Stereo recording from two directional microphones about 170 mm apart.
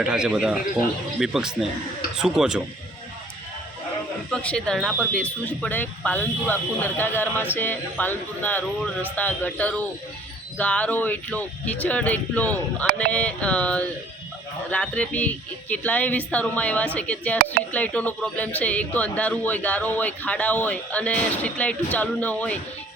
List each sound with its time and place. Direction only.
0.0 s speech: 5° right (ahead or behind)
4.3 s speech: 5° left (ahead or behind)
17.3 s speech: 60° right (ahead or behind)
17.7 s speech: 10° left (ahead or behind)